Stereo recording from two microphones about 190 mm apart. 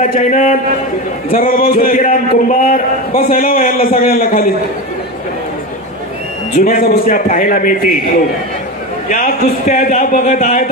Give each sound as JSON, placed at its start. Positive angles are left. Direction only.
{"t": 0.0, "sound": "speech", "side_deg": 45}
{"t": 6.6, "sound": "speech", "side_deg": 50}
{"t": 9.1, "sound": "speech", "side_deg": 45}